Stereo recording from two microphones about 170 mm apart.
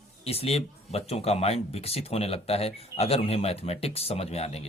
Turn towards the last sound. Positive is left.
turn(degrees=40)  # may be behind; listen again after turning